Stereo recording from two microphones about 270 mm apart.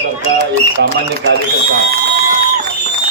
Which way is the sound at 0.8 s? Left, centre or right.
Right.